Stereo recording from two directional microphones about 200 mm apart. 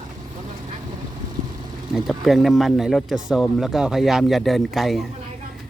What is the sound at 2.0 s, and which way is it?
Speech, centre (ahead or behind).